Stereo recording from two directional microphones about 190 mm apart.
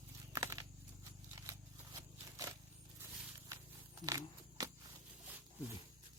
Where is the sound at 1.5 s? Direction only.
15° right (ahead or behind).